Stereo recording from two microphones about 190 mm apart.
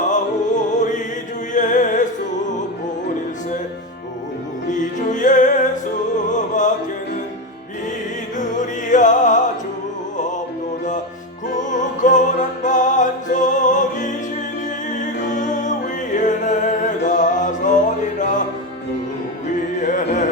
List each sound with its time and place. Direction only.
0.1 s music: 40° left (ahead or behind)
4.7 s music: 40° left (ahead or behind)
8.4 s music: 40° left (ahead or behind)
11.5 s music: 40° left (ahead or behind)
19.8 s music: 40° left (ahead or behind)